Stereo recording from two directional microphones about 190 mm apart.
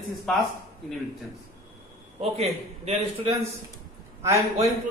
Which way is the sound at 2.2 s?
30° right (ahead or behind).